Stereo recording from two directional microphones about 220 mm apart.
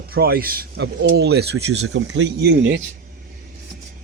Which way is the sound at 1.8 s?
60° right (ahead or behind).